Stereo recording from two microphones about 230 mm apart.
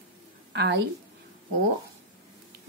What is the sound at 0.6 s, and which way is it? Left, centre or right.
Speech, right.